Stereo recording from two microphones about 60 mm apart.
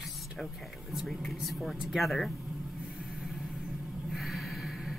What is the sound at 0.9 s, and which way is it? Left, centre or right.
Speech, centre.